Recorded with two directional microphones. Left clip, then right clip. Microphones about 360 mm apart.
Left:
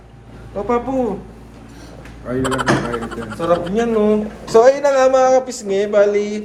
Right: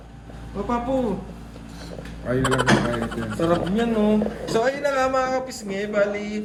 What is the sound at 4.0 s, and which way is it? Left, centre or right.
Speech, left.